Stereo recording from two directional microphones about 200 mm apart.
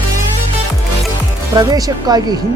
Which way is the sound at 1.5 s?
20° right (ahead or behind).